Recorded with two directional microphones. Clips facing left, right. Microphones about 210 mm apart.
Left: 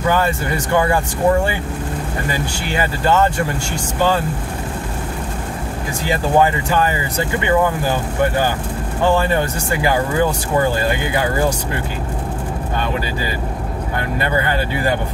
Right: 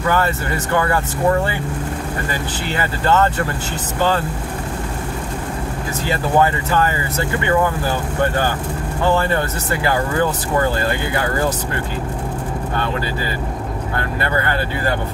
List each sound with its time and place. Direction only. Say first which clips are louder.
0.1 s speech: even; 15° left (ahead or behind)
6.0 s speech: left 1 dB; 15° left (ahead or behind)
13.9 s speech: left 2 dB; 15° left (ahead or behind)